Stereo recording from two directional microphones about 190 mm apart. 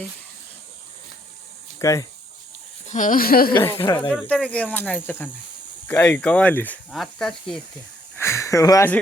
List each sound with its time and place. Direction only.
1.8 s speech: 15° left (ahead or behind)
2.9 s speech: 45° left (ahead or behind)
3.6 s speech: 15° left (ahead or behind)
4.3 s speech: 5° left (ahead or behind)
8.2 s speech: 15° left (ahead or behind)